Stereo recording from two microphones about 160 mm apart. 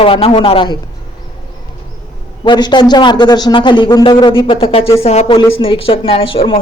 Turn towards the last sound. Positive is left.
turn(degrees=35)  # may be behind; listen again after turning